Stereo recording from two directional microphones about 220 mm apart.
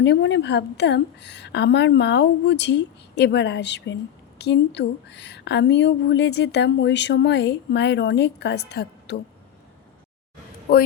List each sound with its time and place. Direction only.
0.0 s a woman's voice: 50° left (ahead or behind)